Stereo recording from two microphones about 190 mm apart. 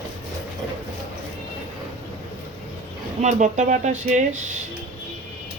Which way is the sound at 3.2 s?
40° right (ahead or behind).